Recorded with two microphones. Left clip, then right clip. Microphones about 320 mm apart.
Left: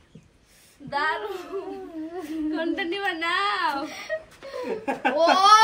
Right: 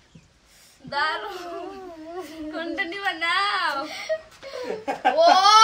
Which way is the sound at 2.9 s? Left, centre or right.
Centre.